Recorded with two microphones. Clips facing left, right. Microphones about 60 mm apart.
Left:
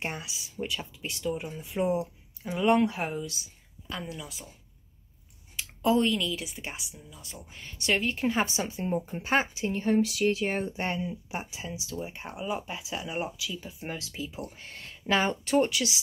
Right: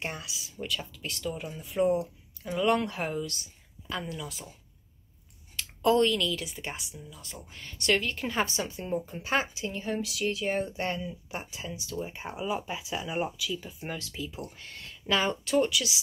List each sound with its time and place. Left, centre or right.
0.0 s a woman's voice: left
0.6 s a woman's voice: left; by 4.5 s centre
5.6 s a woman's voice: centre; by 11.1 s left
11.5 s speech: centre
14.5 s a woman's voice: left